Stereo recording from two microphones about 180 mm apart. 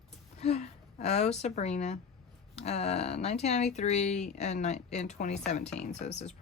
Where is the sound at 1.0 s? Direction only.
40° left (ahead or behind).